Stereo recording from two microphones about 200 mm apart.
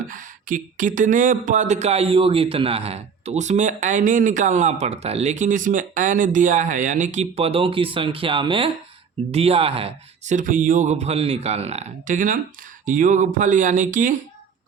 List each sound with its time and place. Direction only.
0.1 s speech: 40° right (ahead or behind)